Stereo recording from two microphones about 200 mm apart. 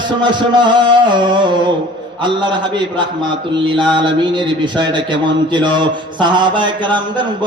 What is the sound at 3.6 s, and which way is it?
Speech, 25° right (ahead or behind).